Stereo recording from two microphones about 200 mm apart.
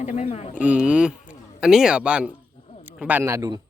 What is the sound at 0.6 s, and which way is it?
A man's voice, 5° right (ahead or behind).